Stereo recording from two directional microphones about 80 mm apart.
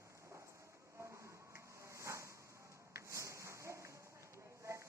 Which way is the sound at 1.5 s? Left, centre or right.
Right.